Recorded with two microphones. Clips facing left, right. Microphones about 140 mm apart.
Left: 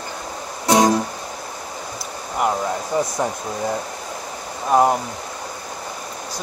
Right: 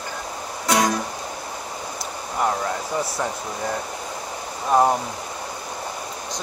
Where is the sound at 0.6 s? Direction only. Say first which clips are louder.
Left 5 dB; 30° left (ahead or behind).